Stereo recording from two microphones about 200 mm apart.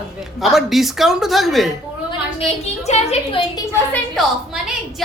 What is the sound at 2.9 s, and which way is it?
Speech, 30° left (ahead or behind).